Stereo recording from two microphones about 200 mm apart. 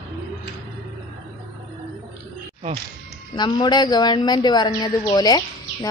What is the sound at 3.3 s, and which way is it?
A woman's voice, 20° left (ahead or behind).